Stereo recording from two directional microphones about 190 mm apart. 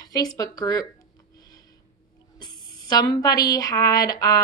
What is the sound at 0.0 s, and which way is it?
Speech, 20° left (ahead or behind).